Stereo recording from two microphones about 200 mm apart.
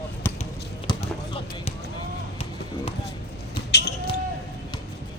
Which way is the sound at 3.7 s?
55° left (ahead or behind).